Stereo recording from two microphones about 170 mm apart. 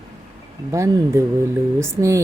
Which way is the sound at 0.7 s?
15° right (ahead or behind).